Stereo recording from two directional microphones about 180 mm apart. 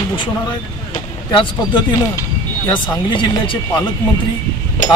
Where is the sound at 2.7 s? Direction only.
25° left (ahead or behind).